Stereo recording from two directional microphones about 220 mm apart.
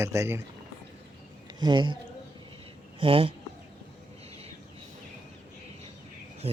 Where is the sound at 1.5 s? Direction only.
20° right (ahead or behind).